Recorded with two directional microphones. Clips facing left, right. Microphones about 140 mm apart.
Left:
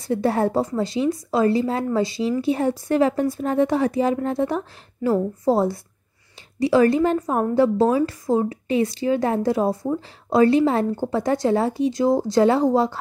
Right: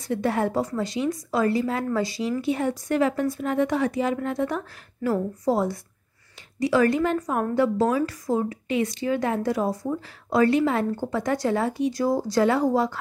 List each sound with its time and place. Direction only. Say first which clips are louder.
0.0 s a woman's voice: left 4 dB; 30° left (ahead or behind)